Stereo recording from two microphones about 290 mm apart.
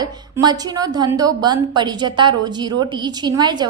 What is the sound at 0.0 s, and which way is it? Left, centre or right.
A woman's voice, centre.